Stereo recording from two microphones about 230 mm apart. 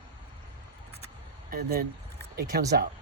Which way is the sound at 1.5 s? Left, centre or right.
Right.